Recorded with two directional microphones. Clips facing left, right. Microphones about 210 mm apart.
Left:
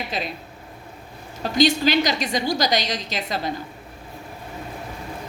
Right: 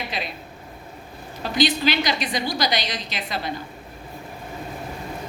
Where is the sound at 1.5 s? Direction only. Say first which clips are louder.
Left 3 dB; 45° left (ahead or behind).